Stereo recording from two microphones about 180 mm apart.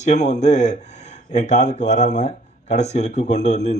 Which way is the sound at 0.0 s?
40° left (ahead or behind).